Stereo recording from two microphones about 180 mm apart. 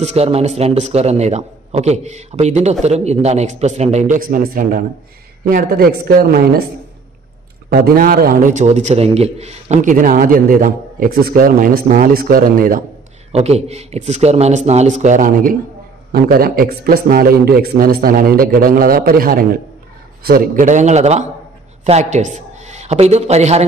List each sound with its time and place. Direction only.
0.0 s a man's voice: 35° right (ahead or behind); by 6.6 s 55° right (ahead or behind)
7.7 s a man's voice: 55° right (ahead or behind)
13.3 s a man's voice: 35° right (ahead or behind)